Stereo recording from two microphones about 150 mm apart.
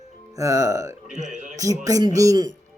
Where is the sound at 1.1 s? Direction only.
55° right (ahead or behind).